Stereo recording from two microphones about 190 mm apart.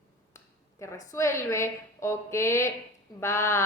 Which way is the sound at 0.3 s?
15° left (ahead or behind).